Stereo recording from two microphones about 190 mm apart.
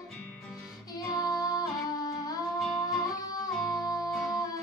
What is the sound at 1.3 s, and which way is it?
Music, 20° left (ahead or behind).